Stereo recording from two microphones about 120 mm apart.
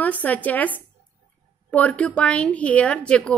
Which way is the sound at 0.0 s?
15° left (ahead or behind).